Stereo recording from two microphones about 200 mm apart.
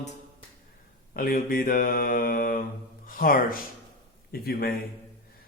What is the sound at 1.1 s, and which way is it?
Speech, 45° left (ahead or behind).